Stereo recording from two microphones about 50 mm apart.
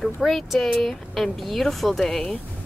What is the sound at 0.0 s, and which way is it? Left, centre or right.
A woman's voice, centre.